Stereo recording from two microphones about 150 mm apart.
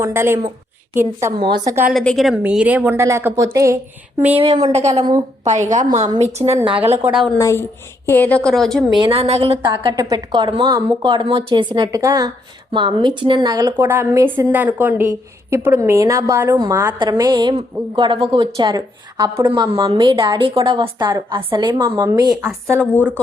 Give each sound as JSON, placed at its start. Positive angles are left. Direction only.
{"t": 0.0, "sound": "a woman's voice", "side_deg": -15}
{"t": 1.9, "sound": "a woman's voice", "side_deg": 0}
{"t": 4.4, "sound": "a woman's voice", "side_deg": -40}
{"t": 6.7, "sound": "a woman's voice", "side_deg": -40}
{"t": 7.0, "sound": "a woman's voice", "side_deg": 0}
{"t": 7.3, "sound": "a woman's voice", "side_deg": 20}
{"t": 9.0, "sound": "a woman's voice", "side_deg": -40}
{"t": 9.6, "sound": "a woman's voice", "side_deg": -25}
{"t": 13.7, "sound": "a woman's voice", "side_deg": -15}
{"t": 20.7, "sound": "a woman's voice", "side_deg": -35}
{"t": 21.9, "sound": "a woman's voice", "side_deg": -20}
{"t": 22.7, "sound": "a woman's voice", "side_deg": 10}